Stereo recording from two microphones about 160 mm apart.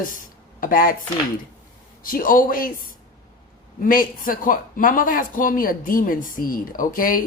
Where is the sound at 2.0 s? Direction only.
60° left (ahead or behind).